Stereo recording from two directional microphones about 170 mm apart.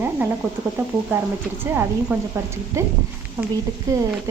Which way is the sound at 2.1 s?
15° right (ahead or behind).